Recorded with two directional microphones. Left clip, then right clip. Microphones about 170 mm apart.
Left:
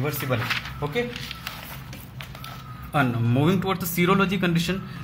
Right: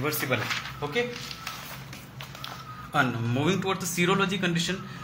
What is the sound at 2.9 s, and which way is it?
Speech, 35° left (ahead or behind).